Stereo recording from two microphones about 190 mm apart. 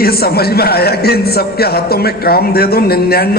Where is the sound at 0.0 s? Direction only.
55° left (ahead or behind).